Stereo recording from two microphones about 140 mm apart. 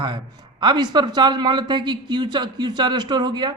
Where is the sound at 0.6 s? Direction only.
30° right (ahead or behind).